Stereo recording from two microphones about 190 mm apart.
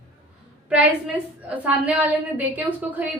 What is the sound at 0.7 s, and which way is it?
A woman's voice, 5° right (ahead or behind).